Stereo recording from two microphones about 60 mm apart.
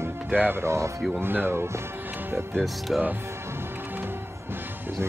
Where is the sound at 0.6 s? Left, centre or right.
Right.